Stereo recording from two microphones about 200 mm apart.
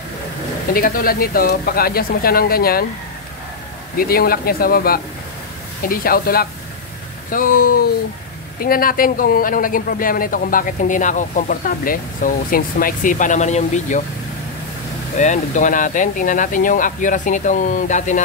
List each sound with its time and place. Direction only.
0.7 s speech: 45° left (ahead or behind)
3.9 s speech: 45° left (ahead or behind)
15.1 s speech: 40° left (ahead or behind)